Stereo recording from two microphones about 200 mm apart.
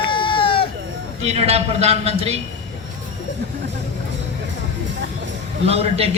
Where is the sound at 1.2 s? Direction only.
30° right (ahead or behind).